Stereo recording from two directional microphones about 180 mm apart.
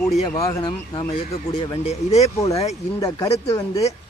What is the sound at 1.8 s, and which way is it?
Speech, 35° left (ahead or behind).